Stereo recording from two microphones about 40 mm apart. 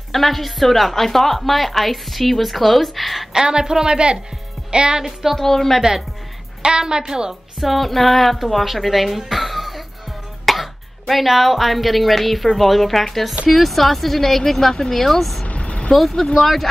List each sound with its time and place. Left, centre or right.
0.1 s a woman's voice: centre
3.3 s a woman's voice: centre
5.3 s a woman's voice: centre
5.8 s a woman's voice: centre
7.6 s a woman's voice: centre
15.4 s vehicle: left
15.9 s a woman's voice: centre